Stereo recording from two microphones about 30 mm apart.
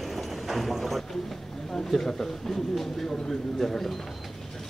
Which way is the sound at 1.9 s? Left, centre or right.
Centre.